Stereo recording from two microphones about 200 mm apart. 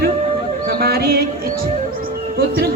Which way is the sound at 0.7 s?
50° right (ahead or behind).